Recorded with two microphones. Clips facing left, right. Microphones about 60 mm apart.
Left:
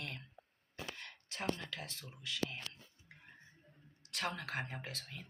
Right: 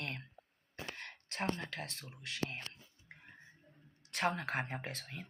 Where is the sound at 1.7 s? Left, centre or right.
Right.